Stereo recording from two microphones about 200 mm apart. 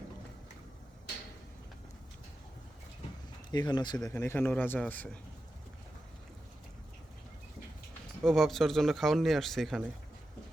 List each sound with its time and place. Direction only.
3.5 s a man's voice: 20° left (ahead or behind)
8.2 s speech: centre (ahead or behind)